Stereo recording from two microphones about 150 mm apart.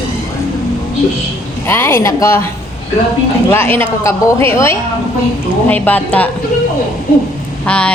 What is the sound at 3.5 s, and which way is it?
A woman's voice, 15° left (ahead or behind).